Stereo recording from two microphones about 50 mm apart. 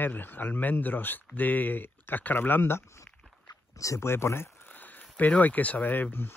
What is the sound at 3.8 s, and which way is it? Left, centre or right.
Speech, left.